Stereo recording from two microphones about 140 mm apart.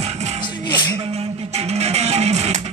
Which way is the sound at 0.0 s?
50° right (ahead or behind).